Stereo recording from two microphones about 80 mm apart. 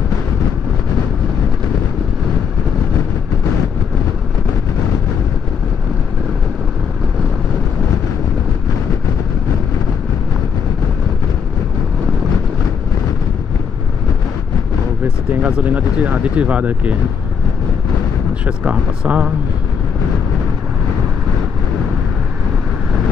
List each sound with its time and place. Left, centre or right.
15.4 s speech: centre
18.6 s speech: centre